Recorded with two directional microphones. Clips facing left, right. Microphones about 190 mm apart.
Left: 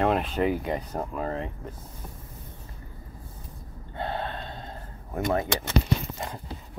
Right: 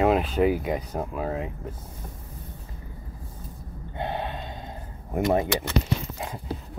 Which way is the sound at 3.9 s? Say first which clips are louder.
Right 1 dB; 15° right (ahead or behind).